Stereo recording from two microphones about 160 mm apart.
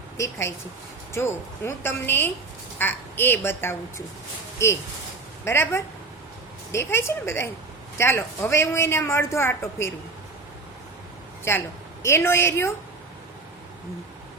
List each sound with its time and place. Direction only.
0.2 s a woman's voice: 15° left (ahead or behind)
11.5 s a woman's voice: 15° left (ahead or behind)